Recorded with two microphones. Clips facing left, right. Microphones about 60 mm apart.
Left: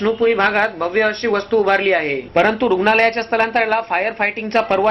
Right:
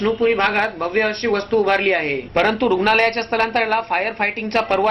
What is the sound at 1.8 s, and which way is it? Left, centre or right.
Speech, left.